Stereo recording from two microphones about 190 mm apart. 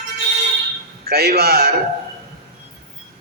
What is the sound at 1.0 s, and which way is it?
Speech, 55° right (ahead or behind).